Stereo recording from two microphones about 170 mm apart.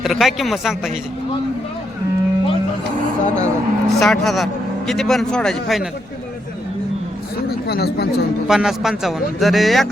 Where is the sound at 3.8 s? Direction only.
Centre (ahead or behind).